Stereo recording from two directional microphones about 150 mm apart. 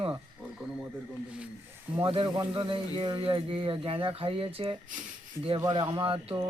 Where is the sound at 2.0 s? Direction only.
35° right (ahead or behind).